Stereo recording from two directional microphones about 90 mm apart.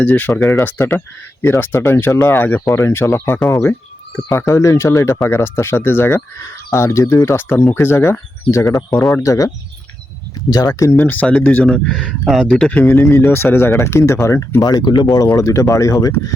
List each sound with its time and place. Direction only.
0.0 s speech: 20° left (ahead or behind); by 8.8 s 35° left (ahead or behind)
8.9 s speech: 5° left (ahead or behind)
9.2 s speech: 40° left (ahead or behind)
10.5 s speech: 45° left (ahead or behind)
11.0 s speech: 20° left (ahead or behind)
11.6 s speech: 10° left (ahead or behind)
12.7 s speech: 20° left (ahead or behind)
14.6 s speech: 50° left (ahead or behind)
15.3 s speech: 35° left (ahead or behind)